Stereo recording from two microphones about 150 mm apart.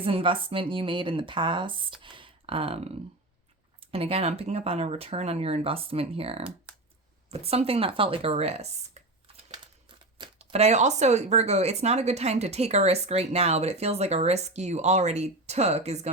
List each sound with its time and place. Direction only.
0.0 s speech: 35° right (ahead or behind)